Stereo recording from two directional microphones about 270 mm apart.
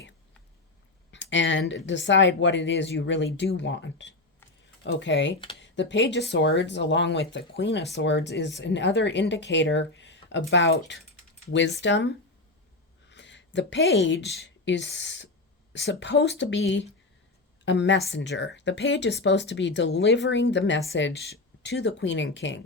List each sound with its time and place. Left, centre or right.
1.1 s speech: left